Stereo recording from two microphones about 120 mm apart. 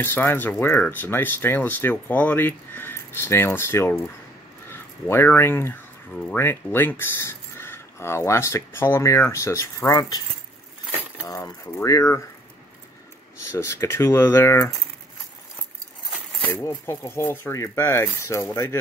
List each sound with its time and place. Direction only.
0.0 s speech: 15° left (ahead or behind); by 10.2 s 35° left (ahead or behind)
11.2 s speech: 30° left (ahead or behind)
13.5 s speech: 25° left (ahead or behind)
16.5 s speech: 20° left (ahead or behind)